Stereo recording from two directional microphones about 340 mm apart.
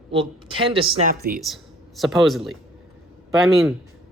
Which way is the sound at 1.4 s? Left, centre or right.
Centre.